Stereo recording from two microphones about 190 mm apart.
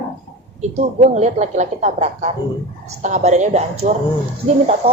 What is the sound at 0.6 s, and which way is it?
Speech, 35° right (ahead or behind).